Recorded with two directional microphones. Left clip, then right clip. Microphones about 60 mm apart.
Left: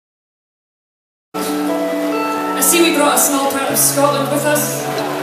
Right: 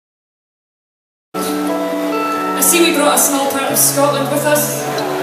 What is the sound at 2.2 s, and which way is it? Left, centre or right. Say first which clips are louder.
Music: right 1 dB; left.